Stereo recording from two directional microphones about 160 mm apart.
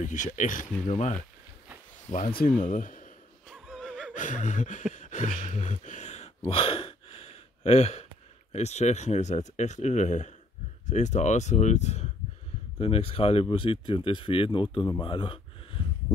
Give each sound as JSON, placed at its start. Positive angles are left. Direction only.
{"t": 0.0, "sound": "speech", "side_deg": 50}
{"t": 3.4, "sound": "laughter", "side_deg": -5}
{"t": 4.1, "sound": "gasp", "side_deg": 50}
{"t": 4.9, "sound": "a sound", "side_deg": 50}
{"t": 5.4, "sound": "speech", "side_deg": 50}